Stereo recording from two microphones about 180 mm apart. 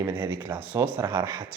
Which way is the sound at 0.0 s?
15° right (ahead or behind).